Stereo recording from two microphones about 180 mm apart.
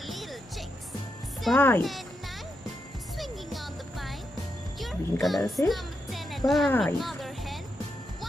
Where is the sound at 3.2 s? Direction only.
Centre (ahead or behind).